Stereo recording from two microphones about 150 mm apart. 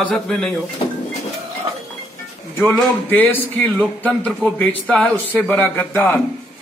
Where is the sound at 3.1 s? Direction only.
10° left (ahead or behind).